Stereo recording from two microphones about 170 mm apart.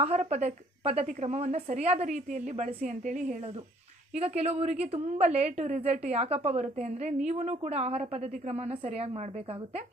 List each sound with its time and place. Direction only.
0.0 s a woman's voice: 40° right (ahead or behind)